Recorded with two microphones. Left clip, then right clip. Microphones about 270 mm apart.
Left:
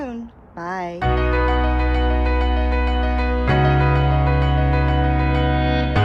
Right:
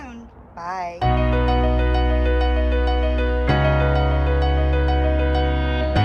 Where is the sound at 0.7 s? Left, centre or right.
Left.